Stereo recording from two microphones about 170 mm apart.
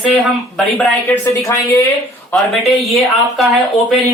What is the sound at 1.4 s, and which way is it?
Speech, 15° left (ahead or behind).